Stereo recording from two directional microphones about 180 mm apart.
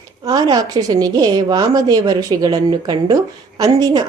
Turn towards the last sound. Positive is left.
turn(degrees=-20)  # may be behind; listen again after turning